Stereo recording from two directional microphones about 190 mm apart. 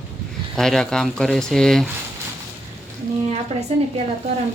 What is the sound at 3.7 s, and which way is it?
Speech, 35° right (ahead or behind).